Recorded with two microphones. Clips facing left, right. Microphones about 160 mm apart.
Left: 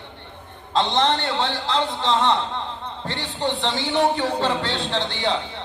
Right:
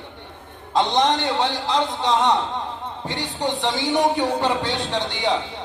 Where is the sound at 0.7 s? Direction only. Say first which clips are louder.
Right 1 dB; 15° right (ahead or behind).